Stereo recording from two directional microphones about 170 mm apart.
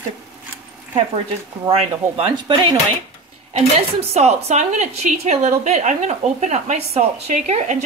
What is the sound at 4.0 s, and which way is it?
A woman's voice, 40° right (ahead or behind).